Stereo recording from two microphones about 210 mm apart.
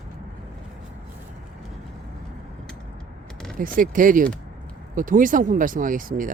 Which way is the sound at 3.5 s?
40° right (ahead or behind).